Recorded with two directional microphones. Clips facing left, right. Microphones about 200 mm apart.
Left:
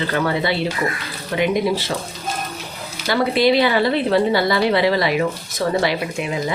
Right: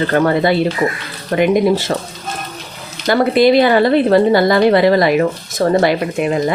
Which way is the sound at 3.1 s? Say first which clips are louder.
Right 5 dB; 50° right (ahead or behind).